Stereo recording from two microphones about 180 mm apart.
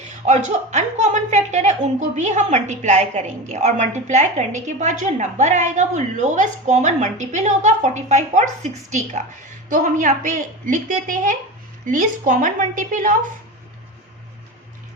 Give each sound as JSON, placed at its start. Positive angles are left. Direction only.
{"t": 0.3, "sound": "a woman's voice", "side_deg": -40}